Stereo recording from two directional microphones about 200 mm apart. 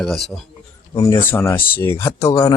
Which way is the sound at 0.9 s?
15° left (ahead or behind).